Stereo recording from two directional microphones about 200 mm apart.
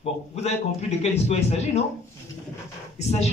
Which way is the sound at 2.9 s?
35° left (ahead or behind).